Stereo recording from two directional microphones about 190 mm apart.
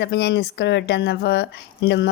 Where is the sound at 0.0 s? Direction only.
60° left (ahead or behind).